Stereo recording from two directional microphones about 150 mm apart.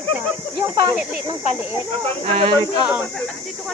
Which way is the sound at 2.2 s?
40° right (ahead or behind).